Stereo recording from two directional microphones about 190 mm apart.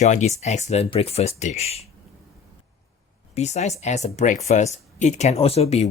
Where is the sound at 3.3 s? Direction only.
35° left (ahead or behind).